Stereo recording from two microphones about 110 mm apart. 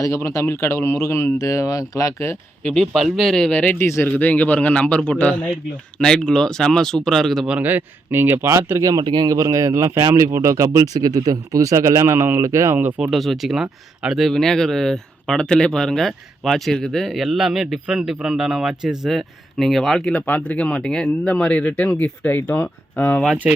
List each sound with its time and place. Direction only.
0.0 s speech: 25° left (ahead or behind)
2.6 s a man's voice: 5° left (ahead or behind)
7.4 s speech: 15° right (ahead or behind)
13.0 s speech: centre (ahead or behind); by 23.2 s 15° left (ahead or behind)
23.4 s speech: 5° right (ahead or behind)